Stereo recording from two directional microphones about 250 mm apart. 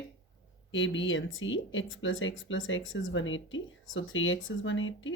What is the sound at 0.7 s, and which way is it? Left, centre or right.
Speech, left.